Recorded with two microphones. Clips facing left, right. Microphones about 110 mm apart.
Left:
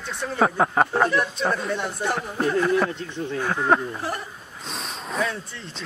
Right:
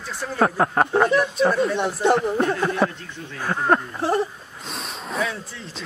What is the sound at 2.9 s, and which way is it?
Speech, 20° left (ahead or behind).